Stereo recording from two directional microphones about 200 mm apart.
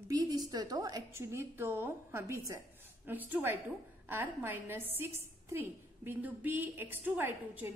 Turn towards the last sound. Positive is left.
turn(degrees=-10)  # may be behind; listen again after turning